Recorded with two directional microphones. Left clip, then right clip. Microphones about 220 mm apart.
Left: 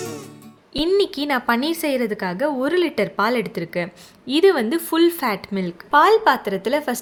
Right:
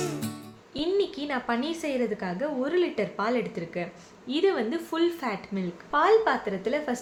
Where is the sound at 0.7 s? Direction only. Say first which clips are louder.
Left 8 dB; 45° left (ahead or behind).